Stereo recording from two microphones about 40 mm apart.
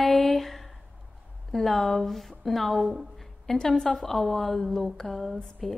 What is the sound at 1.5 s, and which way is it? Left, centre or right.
A woman's voice, centre.